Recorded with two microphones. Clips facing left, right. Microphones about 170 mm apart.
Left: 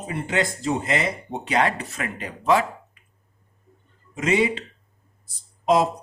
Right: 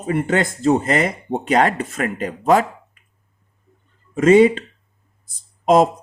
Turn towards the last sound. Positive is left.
turn(degrees=-50)  # may be behind; listen again after turning